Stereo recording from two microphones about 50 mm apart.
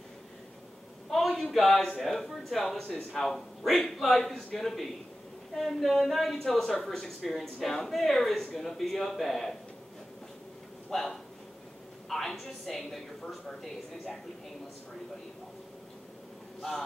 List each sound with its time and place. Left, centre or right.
1.1 s speech: centre
10.9 s speech: centre